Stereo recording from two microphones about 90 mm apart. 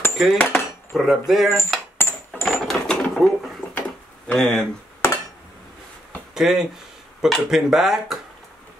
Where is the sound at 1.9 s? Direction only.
25° left (ahead or behind).